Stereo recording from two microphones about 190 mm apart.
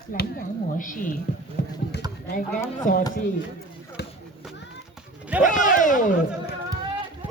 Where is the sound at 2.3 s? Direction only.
40° left (ahead or behind).